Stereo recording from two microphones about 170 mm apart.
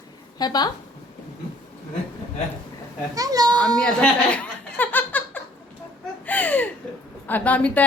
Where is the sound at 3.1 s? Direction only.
20° right (ahead or behind).